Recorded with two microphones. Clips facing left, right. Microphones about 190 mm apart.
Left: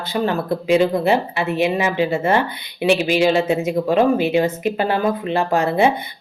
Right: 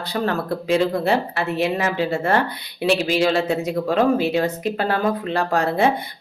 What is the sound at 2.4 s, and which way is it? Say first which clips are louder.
Speech: left 1 dB; 5° left (ahead or behind).